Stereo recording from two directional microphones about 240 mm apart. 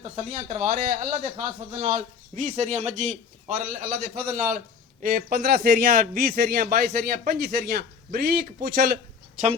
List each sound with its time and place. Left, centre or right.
0.0 s speech: right